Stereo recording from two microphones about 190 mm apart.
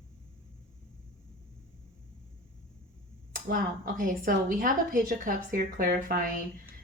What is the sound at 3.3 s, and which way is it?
Speech, 45° right (ahead or behind).